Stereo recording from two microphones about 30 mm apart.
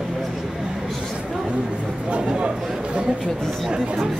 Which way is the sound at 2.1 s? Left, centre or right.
Right.